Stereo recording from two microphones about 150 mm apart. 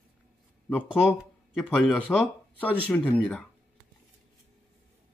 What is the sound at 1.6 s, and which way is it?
Speech, 10° left (ahead or behind).